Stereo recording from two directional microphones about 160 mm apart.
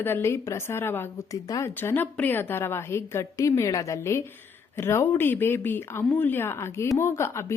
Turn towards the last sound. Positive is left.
turn(degrees=15)  # may be behind; listen again after turning